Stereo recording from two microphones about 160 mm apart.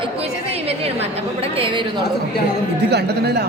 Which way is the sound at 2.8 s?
90° right.